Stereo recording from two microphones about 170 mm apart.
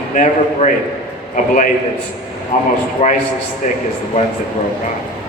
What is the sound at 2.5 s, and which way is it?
Speech, 45° left (ahead or behind).